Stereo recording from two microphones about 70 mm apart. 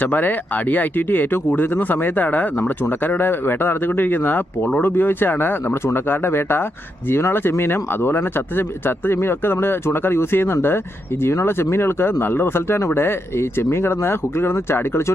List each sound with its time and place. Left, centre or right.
0.0 s speech: left